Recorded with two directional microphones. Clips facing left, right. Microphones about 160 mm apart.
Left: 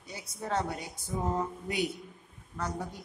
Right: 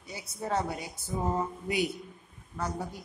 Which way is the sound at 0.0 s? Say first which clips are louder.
Right 2 dB; 10° right (ahead or behind).